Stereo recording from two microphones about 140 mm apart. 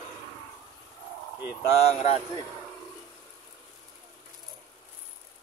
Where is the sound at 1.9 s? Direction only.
50° left (ahead or behind).